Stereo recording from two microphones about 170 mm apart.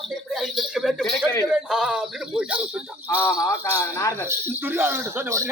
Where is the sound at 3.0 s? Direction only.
15° left (ahead or behind).